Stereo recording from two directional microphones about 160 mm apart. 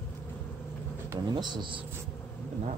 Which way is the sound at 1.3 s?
30° right (ahead or behind).